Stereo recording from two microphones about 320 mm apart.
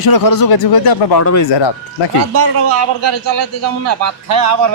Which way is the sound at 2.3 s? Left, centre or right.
Right.